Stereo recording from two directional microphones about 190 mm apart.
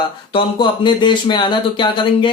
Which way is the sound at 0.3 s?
25° left (ahead or behind).